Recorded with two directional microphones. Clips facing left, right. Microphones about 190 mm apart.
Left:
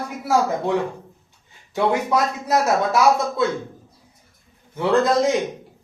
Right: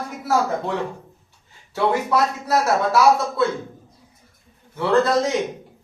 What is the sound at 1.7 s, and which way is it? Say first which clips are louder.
Speech: even; 20° left (ahead or behind).